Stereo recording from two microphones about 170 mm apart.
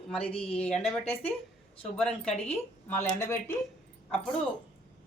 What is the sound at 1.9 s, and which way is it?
Speech, 5° left (ahead or behind).